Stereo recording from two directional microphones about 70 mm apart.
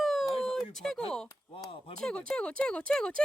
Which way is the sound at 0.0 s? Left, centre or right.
Centre.